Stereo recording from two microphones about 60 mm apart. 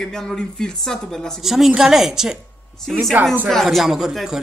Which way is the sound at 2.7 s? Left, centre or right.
Centre.